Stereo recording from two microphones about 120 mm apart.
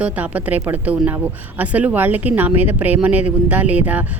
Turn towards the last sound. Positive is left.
turn(degrees=-10)  # may be behind; listen again after turning